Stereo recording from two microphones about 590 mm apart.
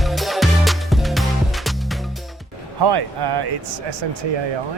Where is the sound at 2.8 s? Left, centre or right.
Right.